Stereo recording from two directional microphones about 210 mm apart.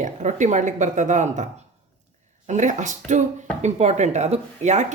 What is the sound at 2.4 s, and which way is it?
Speech, 35° right (ahead or behind).